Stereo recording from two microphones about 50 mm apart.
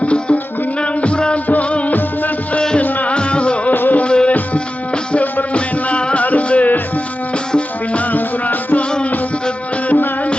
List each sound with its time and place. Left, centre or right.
0.0 s music: left
2.6 s music: centre
2.8 s music: left
3.8 s music: left
4.0 s music: left
5.1 s music: left
5.5 s music: left
8.1 s music: left